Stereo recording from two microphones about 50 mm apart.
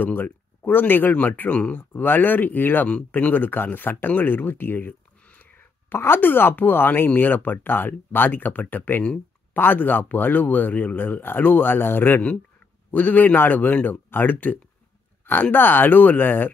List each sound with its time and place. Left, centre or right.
0.0 s a man's voice: left
2.0 s a man's voice: left